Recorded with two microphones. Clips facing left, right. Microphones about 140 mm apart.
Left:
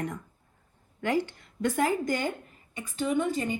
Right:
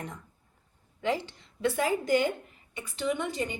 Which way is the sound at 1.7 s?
45° left (ahead or behind).